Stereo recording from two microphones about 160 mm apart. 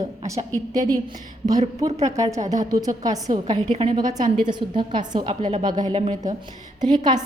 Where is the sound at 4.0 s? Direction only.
25° right (ahead or behind).